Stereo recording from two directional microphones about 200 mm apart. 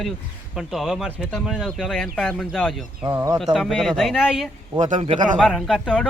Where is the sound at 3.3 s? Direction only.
Centre (ahead or behind).